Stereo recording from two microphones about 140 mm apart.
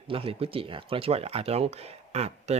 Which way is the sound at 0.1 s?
40° right (ahead or behind).